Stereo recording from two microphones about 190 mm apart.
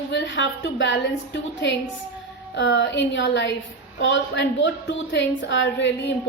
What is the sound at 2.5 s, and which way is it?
A woman's voice, 70° left (ahead or behind).